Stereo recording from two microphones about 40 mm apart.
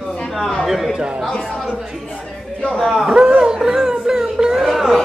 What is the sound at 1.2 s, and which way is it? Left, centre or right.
Speech, centre.